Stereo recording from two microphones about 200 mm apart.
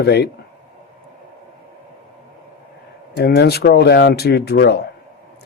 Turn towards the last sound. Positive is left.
turn(degrees=55)  # may be behind; listen again after turning